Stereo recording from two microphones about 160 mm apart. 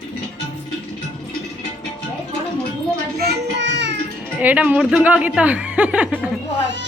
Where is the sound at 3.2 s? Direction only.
90° right.